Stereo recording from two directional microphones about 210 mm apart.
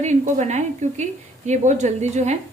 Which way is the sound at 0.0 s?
35° right (ahead or behind).